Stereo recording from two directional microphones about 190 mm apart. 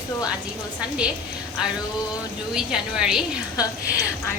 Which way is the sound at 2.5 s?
5° right (ahead or behind).